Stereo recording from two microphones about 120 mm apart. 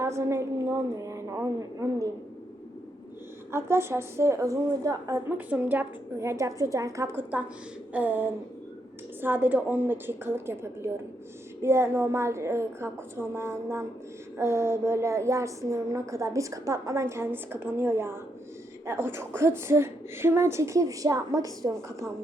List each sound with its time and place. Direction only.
0.0 s a woman's voice: 25° right (ahead or behind)
3.5 s a woman's voice: 20° right (ahead or behind)
5.5 s a woman's voice: 15° right (ahead or behind)
7.2 s a woman's voice: 15° right (ahead or behind)